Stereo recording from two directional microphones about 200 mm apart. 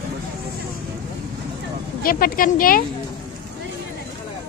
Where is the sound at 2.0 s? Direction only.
45° left (ahead or behind).